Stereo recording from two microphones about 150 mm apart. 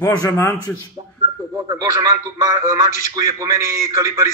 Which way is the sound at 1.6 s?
25° right (ahead or behind).